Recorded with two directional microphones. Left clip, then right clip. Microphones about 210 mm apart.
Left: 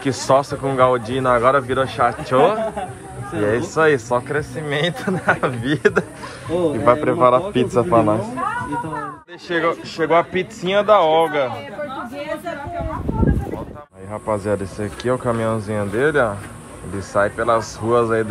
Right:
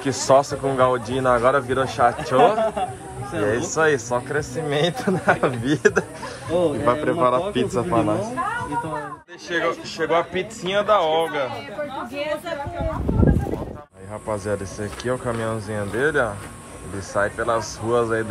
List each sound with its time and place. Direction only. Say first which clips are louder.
0.0 s a man's voice: even; 20° right (ahead or behind)
6.5 s a woman's voice: left 3 dB; centre (ahead or behind)
9.5 s a man's voice: left 3 dB; 10° right (ahead or behind)
14.1 s a man's voice: left 5 dB; 10° right (ahead or behind)